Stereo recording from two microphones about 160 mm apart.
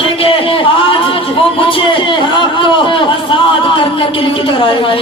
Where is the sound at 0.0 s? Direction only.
35° left (ahead or behind).